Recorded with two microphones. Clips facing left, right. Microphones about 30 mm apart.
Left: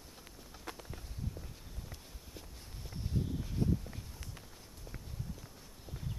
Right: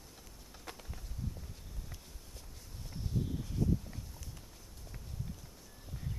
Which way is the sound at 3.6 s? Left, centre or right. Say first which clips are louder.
Even; left.